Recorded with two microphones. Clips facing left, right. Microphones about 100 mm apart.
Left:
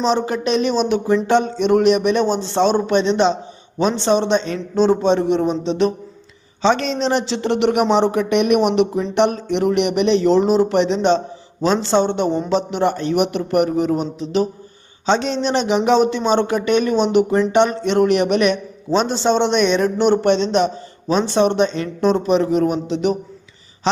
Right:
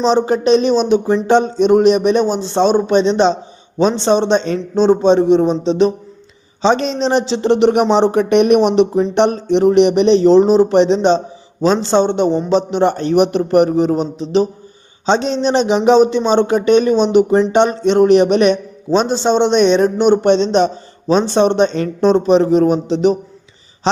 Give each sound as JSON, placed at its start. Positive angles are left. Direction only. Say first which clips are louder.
{"t": 0.0, "sound": "a man's voice", "louder": "right 5 dB", "side_deg": -25}
{"t": 4.8, "sound": "a man's voice", "louder": "right 4 dB", "side_deg": -20}